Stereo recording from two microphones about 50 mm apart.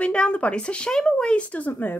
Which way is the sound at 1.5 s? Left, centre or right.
Left.